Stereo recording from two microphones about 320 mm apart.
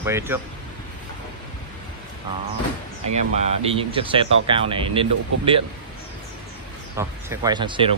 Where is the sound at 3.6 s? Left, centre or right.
Centre.